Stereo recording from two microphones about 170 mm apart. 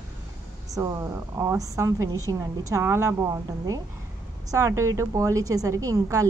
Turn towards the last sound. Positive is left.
turn(degrees=-20)  # may be behind; listen again after turning